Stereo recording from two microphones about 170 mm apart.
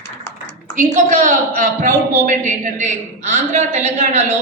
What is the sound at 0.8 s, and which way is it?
A woman's voice, 50° right (ahead or behind).